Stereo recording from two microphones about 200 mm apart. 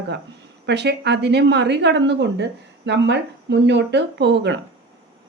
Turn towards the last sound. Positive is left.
turn(degrees=-60)  # may be behind; listen again after turning